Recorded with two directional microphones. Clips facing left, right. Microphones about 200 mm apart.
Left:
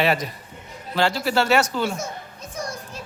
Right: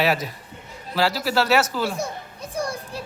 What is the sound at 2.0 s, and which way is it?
Children playing, 30° right (ahead or behind).